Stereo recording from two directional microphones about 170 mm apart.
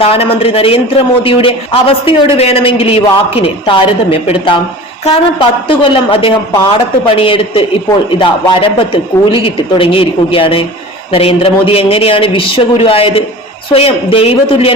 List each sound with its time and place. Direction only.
0.0 s a man's voice: 35° left (ahead or behind)